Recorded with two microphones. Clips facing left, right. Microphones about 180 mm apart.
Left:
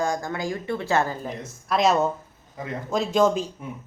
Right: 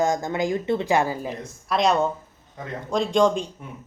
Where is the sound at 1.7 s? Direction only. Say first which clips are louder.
Even; centre (ahead or behind).